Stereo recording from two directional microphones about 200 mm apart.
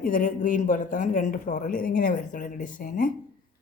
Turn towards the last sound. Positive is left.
turn(degrees=45)  # may be behind; listen again after turning